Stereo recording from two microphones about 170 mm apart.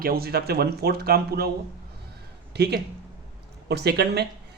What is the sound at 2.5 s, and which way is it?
A man's voice, 75° right (ahead or behind).